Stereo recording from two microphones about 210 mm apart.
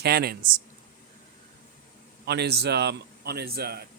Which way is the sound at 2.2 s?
50° right (ahead or behind).